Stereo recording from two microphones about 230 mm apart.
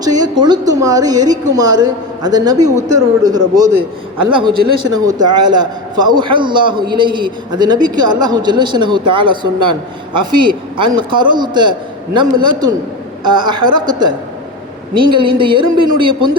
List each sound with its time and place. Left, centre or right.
0.0 s a woman's voice: centre